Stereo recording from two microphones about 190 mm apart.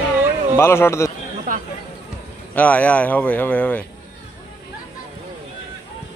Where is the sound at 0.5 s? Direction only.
15° left (ahead or behind).